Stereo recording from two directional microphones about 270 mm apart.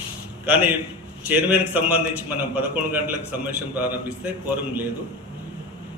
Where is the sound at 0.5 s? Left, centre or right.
Centre.